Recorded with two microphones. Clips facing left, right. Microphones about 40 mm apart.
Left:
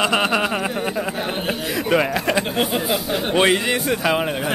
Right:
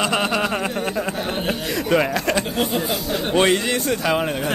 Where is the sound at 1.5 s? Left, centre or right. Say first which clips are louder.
Even; centre.